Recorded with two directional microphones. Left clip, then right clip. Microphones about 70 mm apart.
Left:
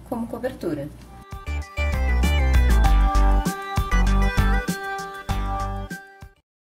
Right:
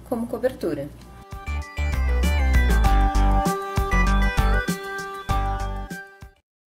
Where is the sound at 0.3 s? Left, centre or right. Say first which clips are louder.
Right 4 dB; right.